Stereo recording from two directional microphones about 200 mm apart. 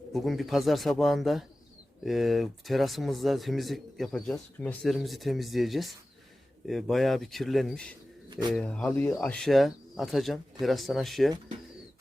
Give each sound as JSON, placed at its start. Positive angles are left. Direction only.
{"t": 0.1, "sound": "speech", "side_deg": 0}
{"t": 8.3, "sound": "speech", "side_deg": -20}
{"t": 8.5, "sound": "speech", "side_deg": 5}